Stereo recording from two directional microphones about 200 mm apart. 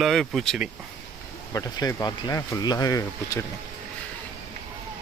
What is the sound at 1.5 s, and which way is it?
Speech, 15° left (ahead or behind).